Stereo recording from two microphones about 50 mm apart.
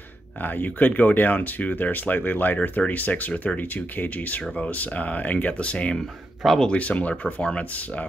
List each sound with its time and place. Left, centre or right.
0.4 s speech: left